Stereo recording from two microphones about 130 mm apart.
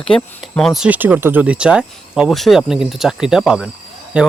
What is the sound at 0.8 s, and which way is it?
Speech, 15° right (ahead or behind).